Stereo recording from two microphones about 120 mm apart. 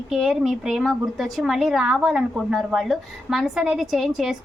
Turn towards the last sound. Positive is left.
turn(degrees=0)  # may be behind; listen again after turning